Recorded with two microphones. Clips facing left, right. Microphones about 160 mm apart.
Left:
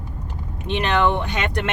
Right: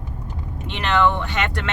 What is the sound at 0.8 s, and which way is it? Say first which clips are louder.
Speech: even; 15° left (ahead or behind).